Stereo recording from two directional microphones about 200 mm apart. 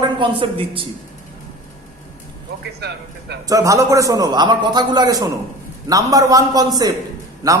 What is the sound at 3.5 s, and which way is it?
A man's voice, 15° right (ahead or behind).